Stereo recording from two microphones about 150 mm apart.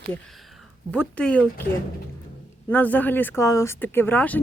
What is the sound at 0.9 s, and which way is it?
Speech, 5° left (ahead or behind).